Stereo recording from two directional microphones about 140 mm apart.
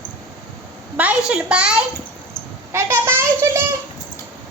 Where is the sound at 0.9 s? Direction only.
10° right (ahead or behind).